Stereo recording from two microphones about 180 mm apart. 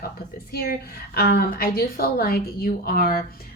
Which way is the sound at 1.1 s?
60° left (ahead or behind).